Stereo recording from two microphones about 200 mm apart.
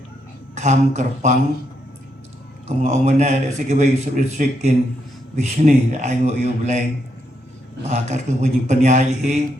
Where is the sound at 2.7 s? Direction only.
35° right (ahead or behind).